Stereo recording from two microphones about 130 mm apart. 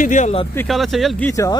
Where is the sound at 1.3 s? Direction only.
25° left (ahead or behind).